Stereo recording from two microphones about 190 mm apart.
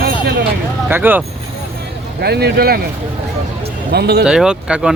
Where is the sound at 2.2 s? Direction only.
60° right (ahead or behind).